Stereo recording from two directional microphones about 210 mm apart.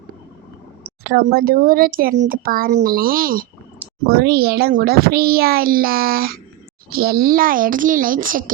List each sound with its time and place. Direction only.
1.0 s a child's voice: 45° right (ahead or behind)